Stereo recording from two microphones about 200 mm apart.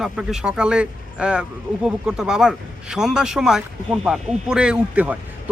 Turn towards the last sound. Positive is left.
turn(degrees=-5)  # may be behind; listen again after turning